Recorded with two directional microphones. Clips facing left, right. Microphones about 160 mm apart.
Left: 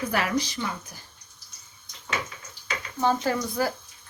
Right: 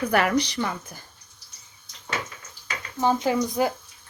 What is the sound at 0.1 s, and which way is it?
Speech, 60° right (ahead or behind).